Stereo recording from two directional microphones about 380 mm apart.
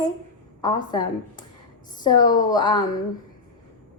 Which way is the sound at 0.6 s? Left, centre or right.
Centre.